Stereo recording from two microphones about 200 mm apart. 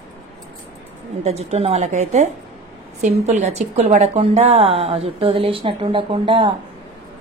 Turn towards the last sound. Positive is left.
turn(degrees=-25)  # may be behind; listen again after turning